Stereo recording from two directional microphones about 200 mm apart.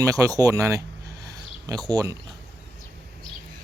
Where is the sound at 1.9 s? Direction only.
15° right (ahead or behind).